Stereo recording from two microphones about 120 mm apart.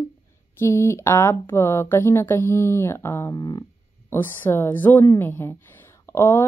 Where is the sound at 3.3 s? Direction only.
35° left (ahead or behind).